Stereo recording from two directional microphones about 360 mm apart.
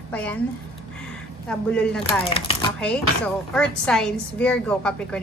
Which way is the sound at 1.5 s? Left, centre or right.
Centre.